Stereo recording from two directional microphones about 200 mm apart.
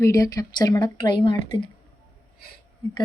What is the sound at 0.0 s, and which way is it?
Speech, 15° left (ahead or behind).